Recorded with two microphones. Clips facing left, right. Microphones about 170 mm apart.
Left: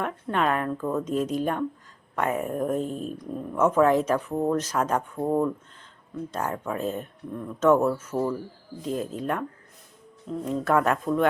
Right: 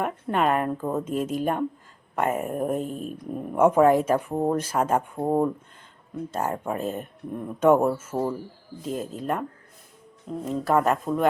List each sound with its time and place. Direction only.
0.0 s speech: 5° right (ahead or behind)
0.8 s a woman's voice: 25° right (ahead or behind)
1.1 s speech: 5° right (ahead or behind)
6.3 s speech: 10° right (ahead or behind)
10.4 s speech: centre (ahead or behind)